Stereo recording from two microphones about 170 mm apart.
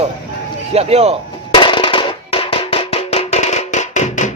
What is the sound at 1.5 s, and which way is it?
Music, 30° left (ahead or behind).